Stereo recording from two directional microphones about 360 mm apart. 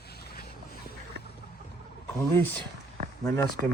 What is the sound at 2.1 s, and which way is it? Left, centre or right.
Speech, centre.